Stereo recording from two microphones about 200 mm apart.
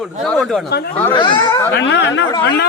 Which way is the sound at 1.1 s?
25° left (ahead or behind).